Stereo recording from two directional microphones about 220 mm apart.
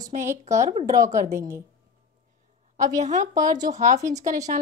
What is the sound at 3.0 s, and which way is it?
Speech, 35° right (ahead or behind).